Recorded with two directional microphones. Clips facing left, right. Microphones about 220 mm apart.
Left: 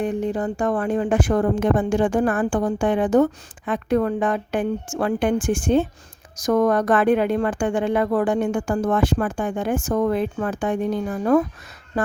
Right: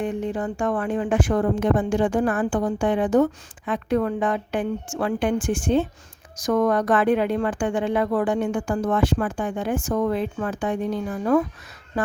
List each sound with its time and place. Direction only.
0.0 s a woman's voice: 40° left (ahead or behind)